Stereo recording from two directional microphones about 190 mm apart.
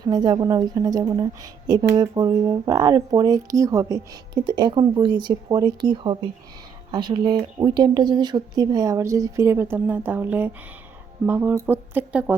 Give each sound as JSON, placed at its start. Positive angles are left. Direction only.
{"t": 0.0, "sound": "a woman's voice", "side_deg": -20}